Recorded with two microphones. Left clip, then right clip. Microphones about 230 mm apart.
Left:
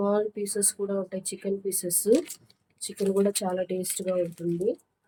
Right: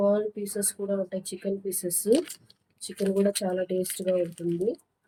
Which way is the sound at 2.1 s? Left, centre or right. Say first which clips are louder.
Left 1 dB; centre.